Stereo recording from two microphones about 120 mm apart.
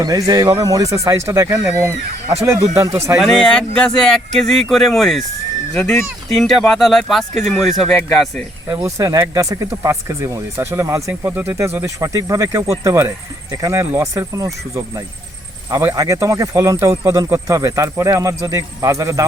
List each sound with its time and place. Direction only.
0.0 s speech: 30° right (ahead or behind)
2.7 s speech: 25° right (ahead or behind)
3.2 s speech: 5° left (ahead or behind)
8.7 s speech: 25° right (ahead or behind)
15.7 s speech: 25° right (ahead or behind)